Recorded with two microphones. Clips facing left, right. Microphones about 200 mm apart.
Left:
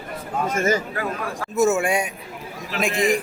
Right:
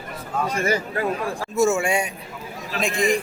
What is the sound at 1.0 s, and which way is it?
Speech, 30° right (ahead or behind).